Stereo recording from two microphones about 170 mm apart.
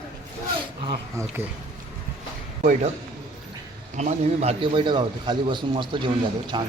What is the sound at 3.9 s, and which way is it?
A man's voice, 45° right (ahead or behind).